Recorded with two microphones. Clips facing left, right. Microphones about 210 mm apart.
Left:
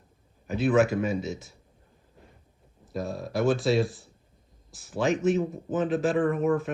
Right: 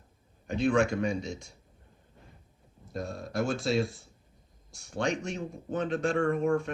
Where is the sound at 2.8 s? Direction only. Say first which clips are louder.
Left 4 dB; centre (ahead or behind).